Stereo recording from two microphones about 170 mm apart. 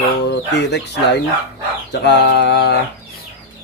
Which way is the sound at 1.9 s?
85° left.